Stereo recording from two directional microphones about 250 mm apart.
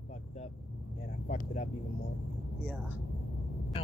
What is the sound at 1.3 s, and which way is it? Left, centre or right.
Vehicle, left.